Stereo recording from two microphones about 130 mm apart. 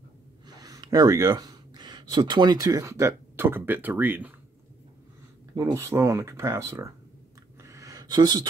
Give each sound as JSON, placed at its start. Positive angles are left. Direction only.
{"t": 0.5, "sound": "speech", "side_deg": -30}
{"t": 5.5, "sound": "speech", "side_deg": -25}
{"t": 7.6, "sound": "a sound", "side_deg": -25}